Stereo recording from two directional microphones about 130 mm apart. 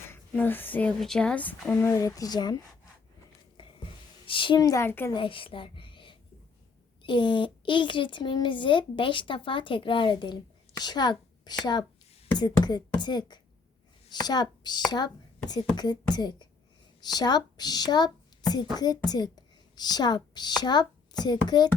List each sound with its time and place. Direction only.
0.1 s speech: 15° left (ahead or behind); by 2.6 s 30° left (ahead or behind)
3.6 s a sound: 40° left (ahead or behind)
4.3 s a woman's voice: 40° left (ahead or behind); by 5.1 s 20° left (ahead or behind)
5.1 s a woman's voice: 40° left (ahead or behind)